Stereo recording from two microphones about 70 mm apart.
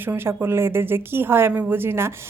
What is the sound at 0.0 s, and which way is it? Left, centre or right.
Speech, right.